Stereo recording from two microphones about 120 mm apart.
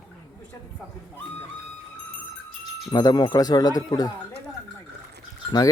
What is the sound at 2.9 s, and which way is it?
Speech, 35° left (ahead or behind).